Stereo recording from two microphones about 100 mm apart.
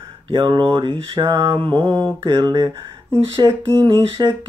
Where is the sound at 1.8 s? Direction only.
35° right (ahead or behind).